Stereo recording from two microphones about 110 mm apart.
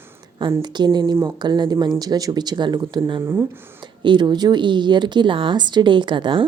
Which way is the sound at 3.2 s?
20° right (ahead or behind).